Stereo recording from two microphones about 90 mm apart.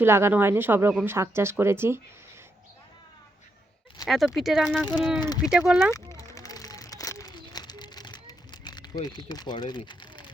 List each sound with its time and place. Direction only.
0.0 s speech: 25° right (ahead or behind)
4.0 s speech: centre (ahead or behind)
5.9 s crumpling: 35° left (ahead or behind)
7.6 s a sound: 50° left (ahead or behind)